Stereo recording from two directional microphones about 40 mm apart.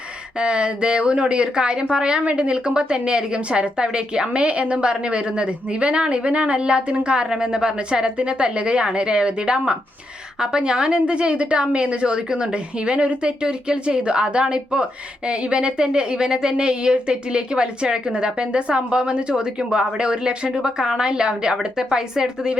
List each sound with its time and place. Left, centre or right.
0.3 s a woman's voice: right